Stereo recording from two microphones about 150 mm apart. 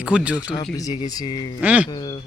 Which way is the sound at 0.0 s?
5° right (ahead or behind).